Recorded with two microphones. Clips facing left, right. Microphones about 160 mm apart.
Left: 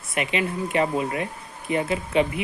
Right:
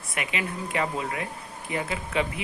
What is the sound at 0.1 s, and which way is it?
Speech, 25° left (ahead or behind).